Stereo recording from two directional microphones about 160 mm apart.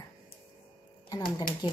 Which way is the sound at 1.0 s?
25° left (ahead or behind).